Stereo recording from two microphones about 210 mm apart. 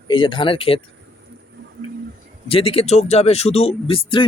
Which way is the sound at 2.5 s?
25° left (ahead or behind).